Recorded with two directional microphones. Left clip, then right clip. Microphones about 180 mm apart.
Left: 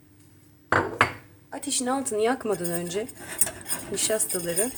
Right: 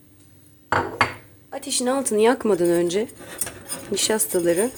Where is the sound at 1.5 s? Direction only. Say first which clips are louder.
Right 4 dB; 35° right (ahead or behind).